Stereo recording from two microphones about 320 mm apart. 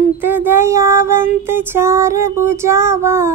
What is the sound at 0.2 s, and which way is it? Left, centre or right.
Female singing, centre.